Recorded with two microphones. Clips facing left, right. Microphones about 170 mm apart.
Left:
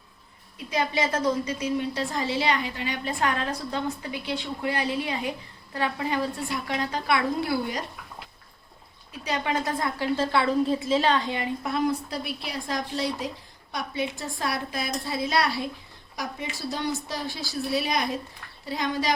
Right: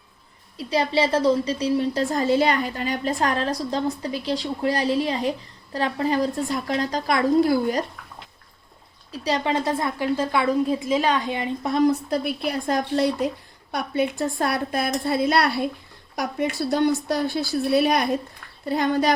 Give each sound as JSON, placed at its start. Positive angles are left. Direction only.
{"t": 0.5, "sound": "a woman's voice", "side_deg": -35}
{"t": 9.1, "sound": "a woman's voice", "side_deg": -35}
{"t": 12.1, "sound": "a woman's voice", "side_deg": -50}